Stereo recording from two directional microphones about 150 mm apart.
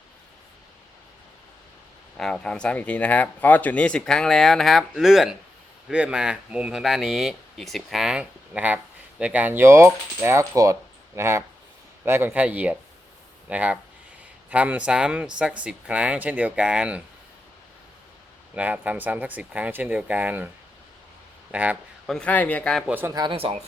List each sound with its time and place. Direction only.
2.1 s speech: 5° left (ahead or behind)
18.5 s speech: 10° right (ahead or behind)
21.5 s speech: 10° right (ahead or behind)
22.0 s a man's voice: 5° left (ahead or behind)
22.9 s speech: 15° right (ahead or behind)
23.1 s speech: 35° right (ahead or behind)